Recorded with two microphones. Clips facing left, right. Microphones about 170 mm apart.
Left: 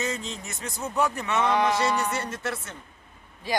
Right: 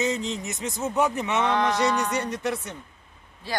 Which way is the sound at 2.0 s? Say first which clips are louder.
Right 2 dB; 15° right (ahead or behind).